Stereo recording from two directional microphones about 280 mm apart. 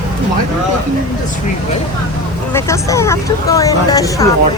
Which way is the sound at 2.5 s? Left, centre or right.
Centre.